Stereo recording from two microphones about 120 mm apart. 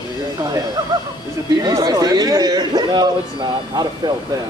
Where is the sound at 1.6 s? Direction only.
30° right (ahead or behind).